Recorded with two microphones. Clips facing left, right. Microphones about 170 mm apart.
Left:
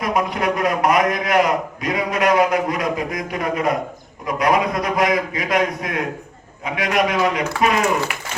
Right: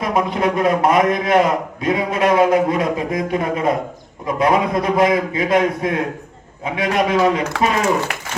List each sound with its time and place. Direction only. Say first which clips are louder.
0.0 s a man's voice: right 2 dB; 25° right (ahead or behind)